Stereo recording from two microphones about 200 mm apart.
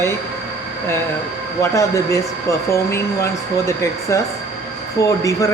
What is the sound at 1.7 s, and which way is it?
Speech, 15° left (ahead or behind).